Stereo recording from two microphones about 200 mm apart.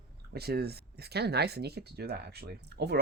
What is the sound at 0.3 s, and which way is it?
Speech, 55° right (ahead or behind).